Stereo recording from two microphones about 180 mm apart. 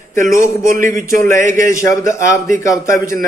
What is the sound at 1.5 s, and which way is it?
Speech, 15° left (ahead or behind).